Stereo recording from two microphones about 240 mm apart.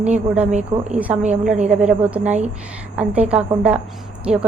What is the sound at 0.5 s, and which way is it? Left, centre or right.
Speech, right.